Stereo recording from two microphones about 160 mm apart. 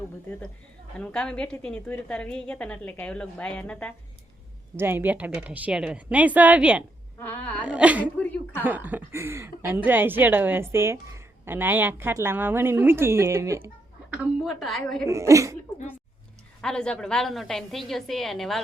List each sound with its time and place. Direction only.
0.9 s a woman's voice: 5° left (ahead or behind)
4.8 s a woman's voice: 15° right (ahead or behind)
7.2 s a woman's voice: 10° left (ahead or behind)
7.6 s a woman's voice: 5° right (ahead or behind)
8.2 s a sound: 10° left (ahead or behind)
8.6 s a woman's voice: 10° right (ahead or behind)
14.1 s a woman's voice: 5° right (ahead or behind)
15.0 s a woman's voice: 20° right (ahead or behind)
16.6 s a woman's voice: 5° left (ahead or behind)